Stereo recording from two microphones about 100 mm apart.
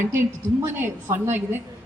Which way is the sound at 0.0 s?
25° right (ahead or behind).